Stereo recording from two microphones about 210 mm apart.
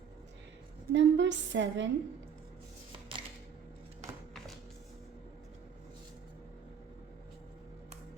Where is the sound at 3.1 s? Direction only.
25° right (ahead or behind).